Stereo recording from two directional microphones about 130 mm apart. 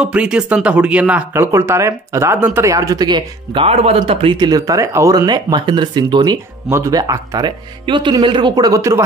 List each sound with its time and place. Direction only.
0.0 s speech: 5° right (ahead or behind); by 3.6 s 35° right (ahead or behind)
3.6 s speech: 50° right (ahead or behind); by 9.0 s 25° right (ahead or behind)